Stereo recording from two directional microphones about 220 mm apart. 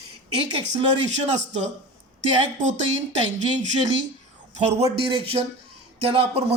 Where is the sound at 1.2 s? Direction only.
30° right (ahead or behind).